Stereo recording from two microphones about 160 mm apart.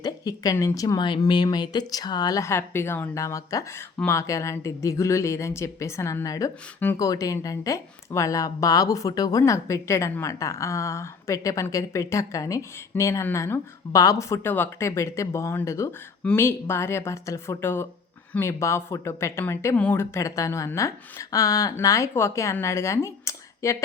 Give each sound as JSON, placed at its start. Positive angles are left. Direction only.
{"t": 0.0, "sound": "speech", "side_deg": 25}